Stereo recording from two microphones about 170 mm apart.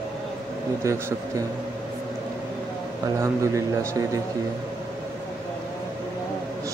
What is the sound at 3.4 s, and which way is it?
Speech, 20° right (ahead or behind).